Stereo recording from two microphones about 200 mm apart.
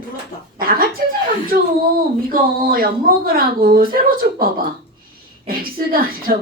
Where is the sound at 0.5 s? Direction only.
45° right (ahead or behind).